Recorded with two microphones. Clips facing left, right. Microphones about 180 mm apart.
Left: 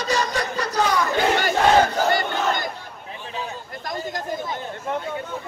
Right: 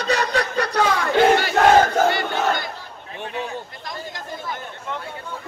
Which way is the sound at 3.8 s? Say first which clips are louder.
Left 4 dB; 45° left (ahead or behind).